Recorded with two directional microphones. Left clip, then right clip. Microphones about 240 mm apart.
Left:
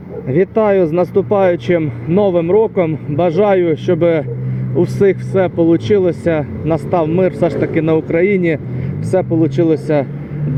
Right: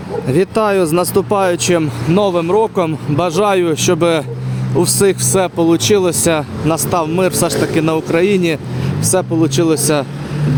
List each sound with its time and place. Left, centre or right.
0.3 s speech: centre